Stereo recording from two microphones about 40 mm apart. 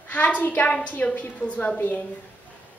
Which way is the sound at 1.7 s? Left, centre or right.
Left.